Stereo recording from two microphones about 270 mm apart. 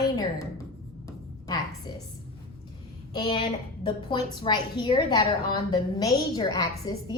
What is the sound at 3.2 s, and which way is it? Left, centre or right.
A woman's voice, centre.